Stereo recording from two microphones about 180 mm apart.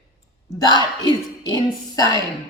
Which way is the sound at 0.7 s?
25° left (ahead or behind).